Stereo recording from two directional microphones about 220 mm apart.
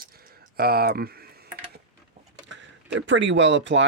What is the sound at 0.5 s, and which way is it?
Speech, 45° right (ahead or behind).